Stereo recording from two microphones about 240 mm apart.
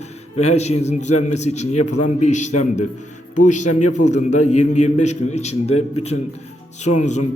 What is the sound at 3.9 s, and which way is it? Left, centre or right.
A man's voice, left.